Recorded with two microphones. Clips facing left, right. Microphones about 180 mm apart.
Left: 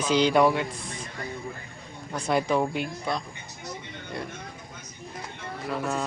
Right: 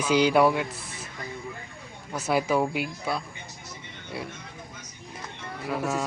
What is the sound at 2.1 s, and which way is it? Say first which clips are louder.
Speech: even; 5° right (ahead or behind).